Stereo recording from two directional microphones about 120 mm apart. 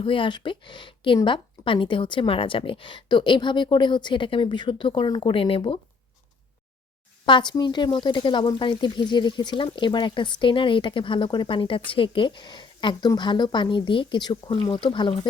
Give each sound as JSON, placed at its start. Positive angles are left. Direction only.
{"t": 0.0, "sound": "a woman's voice", "side_deg": 45}
{"t": 7.3, "sound": "speech", "side_deg": 40}